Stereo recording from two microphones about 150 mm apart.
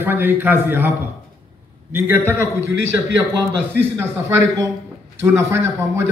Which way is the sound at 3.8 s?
15° right (ahead or behind).